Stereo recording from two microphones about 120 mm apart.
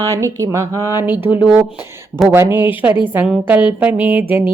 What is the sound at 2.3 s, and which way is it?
Speech, 15° right (ahead or behind).